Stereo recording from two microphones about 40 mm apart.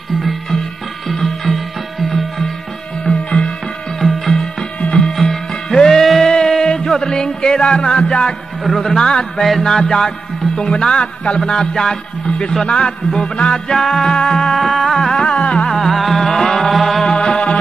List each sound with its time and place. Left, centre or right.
1.0 s music: centre
3.1 s music: left
4.0 s music: centre; by 8.4 s left
8.6 s speech: centre
8.9 s a man's voice: centre
12.6 s carnatic music: left
13.4 s a man's voice: centre
15.2 s carnatic music: left
15.7 s music: centre
17.0 s music: centre